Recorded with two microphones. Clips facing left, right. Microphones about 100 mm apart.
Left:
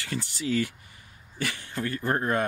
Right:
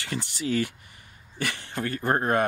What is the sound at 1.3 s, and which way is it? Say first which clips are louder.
Speech: right 1 dB; 65° right (ahead or behind).